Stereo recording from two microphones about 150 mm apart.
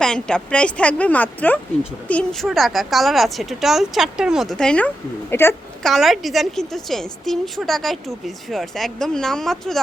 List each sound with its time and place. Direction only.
0.0 s a woman's voice: 5° left (ahead or behind)
5.8 s a woman's voice: centre (ahead or behind)